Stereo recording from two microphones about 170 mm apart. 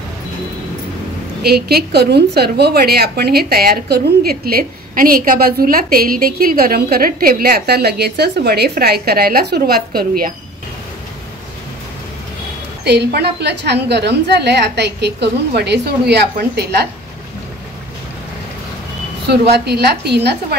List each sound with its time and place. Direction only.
1.4 s a woman's voice: 65° right (ahead or behind)
12.8 s a woman's voice: 80° right
19.5 s a woman's voice: 70° right (ahead or behind)